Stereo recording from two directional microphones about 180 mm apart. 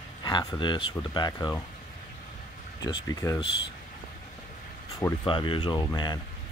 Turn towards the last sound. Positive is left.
turn(degrees=20)  # may be behind; listen again after turning